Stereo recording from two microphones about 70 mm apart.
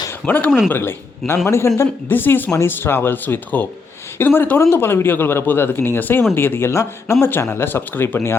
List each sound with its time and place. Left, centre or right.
0.1 s speech: left
2.0 s speech: left